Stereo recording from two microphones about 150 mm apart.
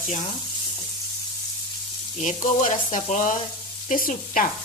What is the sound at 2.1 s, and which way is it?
Frying, 55° left (ahead or behind).